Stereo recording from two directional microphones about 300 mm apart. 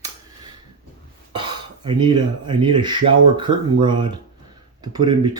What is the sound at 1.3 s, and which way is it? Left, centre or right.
Speech, centre.